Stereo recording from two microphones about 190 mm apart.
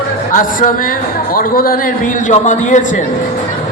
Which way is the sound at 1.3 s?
50° left (ahead or behind).